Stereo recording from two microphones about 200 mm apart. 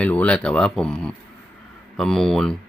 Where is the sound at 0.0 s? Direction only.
5° left (ahead or behind).